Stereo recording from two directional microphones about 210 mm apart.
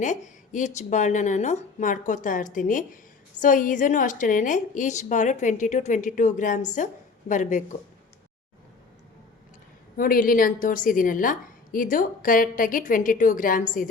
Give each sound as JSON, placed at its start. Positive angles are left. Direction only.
{"t": 0.0, "sound": "a woman's voice", "side_deg": 35}
{"t": 10.0, "sound": "a woman's voice", "side_deg": 40}